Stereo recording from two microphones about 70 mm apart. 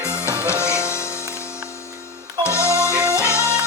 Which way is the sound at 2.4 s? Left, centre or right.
Left.